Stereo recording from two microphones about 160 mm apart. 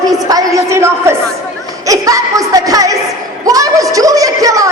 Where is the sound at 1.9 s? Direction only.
20° right (ahead or behind).